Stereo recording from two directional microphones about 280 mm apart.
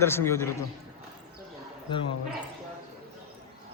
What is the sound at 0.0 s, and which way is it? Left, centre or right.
Speech, centre.